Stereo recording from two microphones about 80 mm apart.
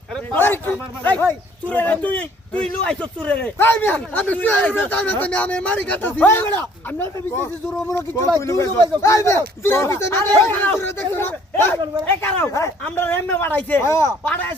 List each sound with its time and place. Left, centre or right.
0.3 s a man's voice: left
3.6 s a man's voice: left
7.9 s speech: left
12.5 s speech: left
13.0 s a man's voice: left
13.8 s speech: left